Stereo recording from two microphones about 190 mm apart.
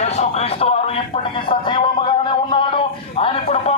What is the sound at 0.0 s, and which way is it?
Music, 35° left (ahead or behind).